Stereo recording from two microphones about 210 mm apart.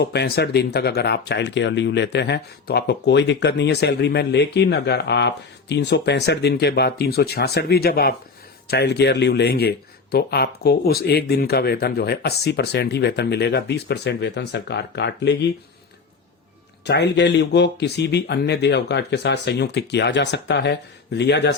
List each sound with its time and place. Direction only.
0.0 s speech: 50° left (ahead or behind)
16.8 s speech: 55° left (ahead or behind)